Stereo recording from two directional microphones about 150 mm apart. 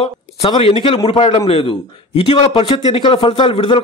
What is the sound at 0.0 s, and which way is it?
A man's voice, 40° left (ahead or behind).